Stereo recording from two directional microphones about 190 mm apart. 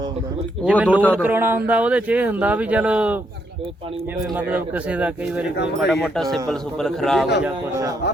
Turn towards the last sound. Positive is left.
turn(degrees=-15)  # may be behind; listen again after turning